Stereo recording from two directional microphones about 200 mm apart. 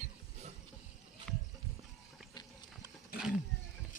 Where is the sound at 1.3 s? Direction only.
Centre (ahead or behind).